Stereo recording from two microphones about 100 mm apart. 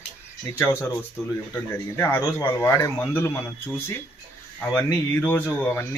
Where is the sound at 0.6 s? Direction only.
25° left (ahead or behind).